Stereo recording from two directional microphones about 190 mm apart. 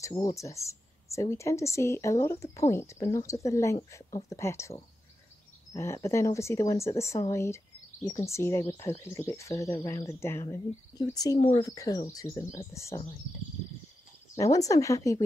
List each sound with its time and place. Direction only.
0.0 s speech: 20° left (ahead or behind)
11.3 s speech: 35° left (ahead or behind)
11.6 s speech: 20° left (ahead or behind)
14.3 s speech: 20° left (ahead or behind)